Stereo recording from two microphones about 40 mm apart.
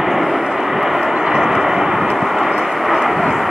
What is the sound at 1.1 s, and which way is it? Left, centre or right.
Vehicle, right.